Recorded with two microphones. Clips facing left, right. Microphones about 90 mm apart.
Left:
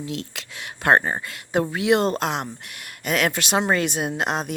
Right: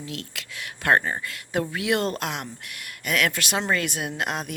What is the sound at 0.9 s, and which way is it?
Speech, 30° left (ahead or behind).